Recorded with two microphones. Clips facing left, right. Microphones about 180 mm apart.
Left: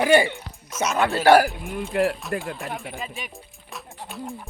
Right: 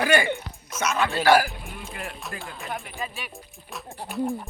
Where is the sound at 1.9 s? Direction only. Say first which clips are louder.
Left 16 dB; 65° left (ahead or behind).